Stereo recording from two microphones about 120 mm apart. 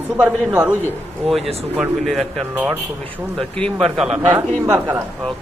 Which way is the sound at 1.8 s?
Centre (ahead or behind).